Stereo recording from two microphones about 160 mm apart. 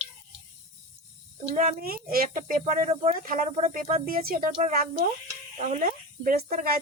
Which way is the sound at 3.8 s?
55° right (ahead or behind).